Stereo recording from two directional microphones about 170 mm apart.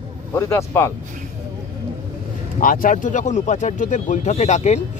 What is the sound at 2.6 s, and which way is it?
Speech, 55° left (ahead or behind).